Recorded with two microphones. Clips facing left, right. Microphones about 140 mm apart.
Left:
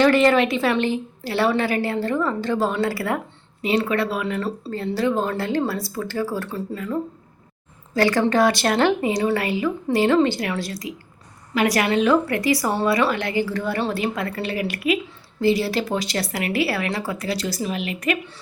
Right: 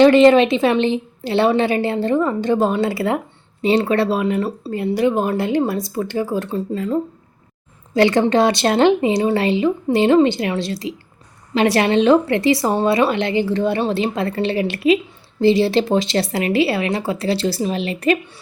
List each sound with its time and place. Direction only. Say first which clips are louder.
0.0 s a woman's voice: right 6 dB; 20° right (ahead or behind)